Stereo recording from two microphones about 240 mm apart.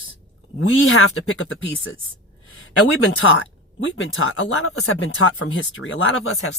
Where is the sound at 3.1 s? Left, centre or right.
Left.